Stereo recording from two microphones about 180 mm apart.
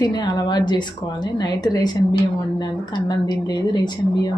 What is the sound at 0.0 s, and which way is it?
A woman's voice, 25° left (ahead or behind).